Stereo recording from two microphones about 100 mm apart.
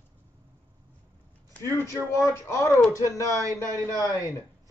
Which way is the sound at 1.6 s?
30° left (ahead or behind).